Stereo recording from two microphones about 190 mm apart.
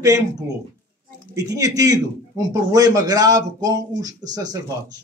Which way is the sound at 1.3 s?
15° right (ahead or behind).